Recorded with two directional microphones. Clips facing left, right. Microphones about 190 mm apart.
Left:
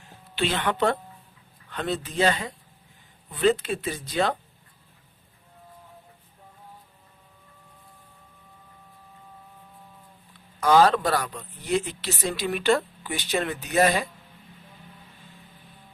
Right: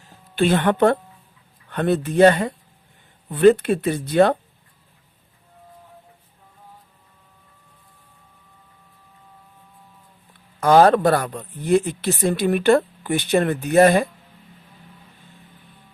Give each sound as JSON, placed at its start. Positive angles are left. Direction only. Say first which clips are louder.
{"t": 0.0, "sound": "a sound", "louder": "right 8 dB", "side_deg": -50}
{"t": 1.7, "sound": "speech", "louder": "right 9 dB", "side_deg": -60}
{"t": 10.6, "sound": "speech", "louder": "right 5 dB", "side_deg": -50}